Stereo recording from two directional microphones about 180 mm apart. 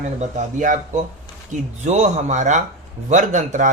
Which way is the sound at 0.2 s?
45° right (ahead or behind).